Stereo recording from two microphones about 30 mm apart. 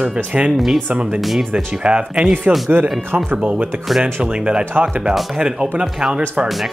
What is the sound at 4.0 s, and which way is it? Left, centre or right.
Speech, right.